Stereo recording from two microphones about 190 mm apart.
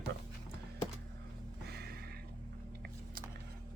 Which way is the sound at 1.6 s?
60° right (ahead or behind).